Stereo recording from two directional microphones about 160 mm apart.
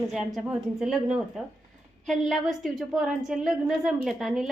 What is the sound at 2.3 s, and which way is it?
A woman's voice, centre (ahead or behind).